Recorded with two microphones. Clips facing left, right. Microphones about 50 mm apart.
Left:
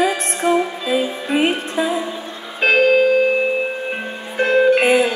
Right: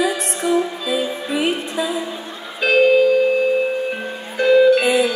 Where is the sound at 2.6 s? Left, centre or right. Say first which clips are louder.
Even; left.